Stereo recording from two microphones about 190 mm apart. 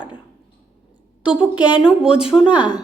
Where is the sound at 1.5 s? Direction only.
20° left (ahead or behind).